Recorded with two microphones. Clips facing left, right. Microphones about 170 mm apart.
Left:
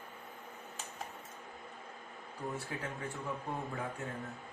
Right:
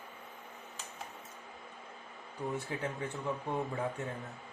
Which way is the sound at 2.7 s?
20° right (ahead or behind).